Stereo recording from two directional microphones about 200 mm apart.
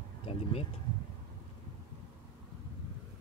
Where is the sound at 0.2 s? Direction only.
30° left (ahead or behind).